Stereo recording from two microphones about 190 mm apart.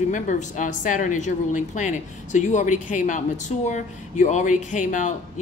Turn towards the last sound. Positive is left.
turn(degrees=40)  # may be behind; listen again after turning